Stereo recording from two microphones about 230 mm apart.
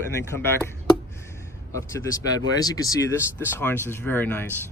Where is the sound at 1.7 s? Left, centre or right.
Centre.